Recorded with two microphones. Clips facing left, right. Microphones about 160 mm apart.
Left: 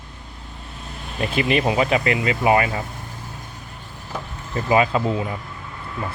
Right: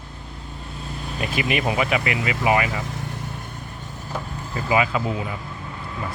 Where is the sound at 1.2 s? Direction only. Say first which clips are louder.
Left 4 dB; 30° left (ahead or behind).